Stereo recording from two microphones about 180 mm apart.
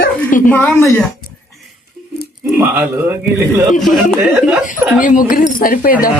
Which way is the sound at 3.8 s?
Centre (ahead or behind).